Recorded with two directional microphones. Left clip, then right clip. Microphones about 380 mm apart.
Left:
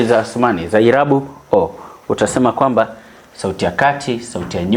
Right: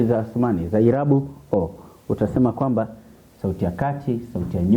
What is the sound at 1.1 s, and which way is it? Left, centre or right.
Speech, centre.